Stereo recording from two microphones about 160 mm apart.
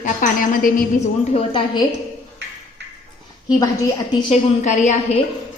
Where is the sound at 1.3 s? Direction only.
30° left (ahead or behind).